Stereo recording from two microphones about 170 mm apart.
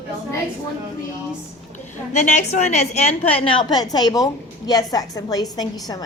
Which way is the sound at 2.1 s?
45° left (ahead or behind).